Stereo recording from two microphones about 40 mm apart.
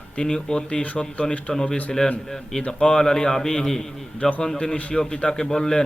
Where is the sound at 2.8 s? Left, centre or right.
Centre.